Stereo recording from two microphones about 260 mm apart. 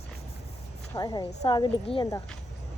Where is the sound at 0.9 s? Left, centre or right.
Centre.